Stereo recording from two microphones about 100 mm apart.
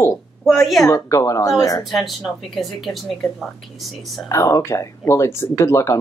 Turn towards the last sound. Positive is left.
turn(degrees=30)  # may be behind; listen again after turning